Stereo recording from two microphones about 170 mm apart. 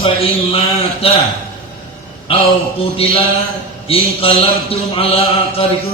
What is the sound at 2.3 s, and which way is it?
A man's voice, 35° left (ahead or behind).